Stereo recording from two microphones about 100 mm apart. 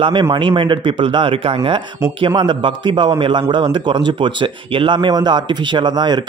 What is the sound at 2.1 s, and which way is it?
Speech, 55° right (ahead or behind).